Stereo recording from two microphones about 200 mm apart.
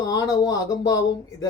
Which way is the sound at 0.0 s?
20° left (ahead or behind).